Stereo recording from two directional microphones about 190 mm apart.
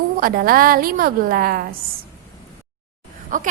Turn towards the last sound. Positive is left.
turn(degrees=-45)  # may be behind; listen again after turning